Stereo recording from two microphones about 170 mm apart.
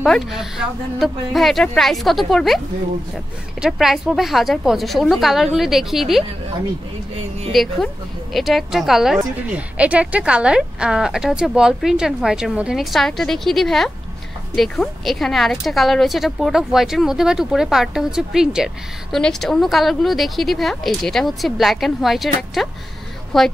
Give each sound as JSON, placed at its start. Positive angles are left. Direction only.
{"t": 0.0, "sound": "a woman's voice", "side_deg": 0}
{"t": 3.6, "sound": "a woman's voice", "side_deg": 0}
{"t": 7.5, "sound": "a woman's voice", "side_deg": 0}